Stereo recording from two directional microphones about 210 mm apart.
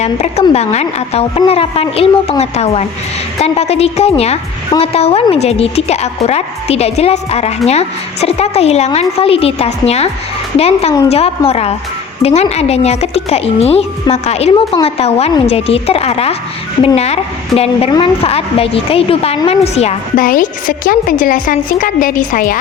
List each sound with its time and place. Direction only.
0.0 s a woman's voice: 30° left (ahead or behind)